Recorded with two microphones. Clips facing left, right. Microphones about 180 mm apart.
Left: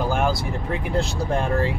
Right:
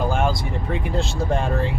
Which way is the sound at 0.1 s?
Centre (ahead or behind).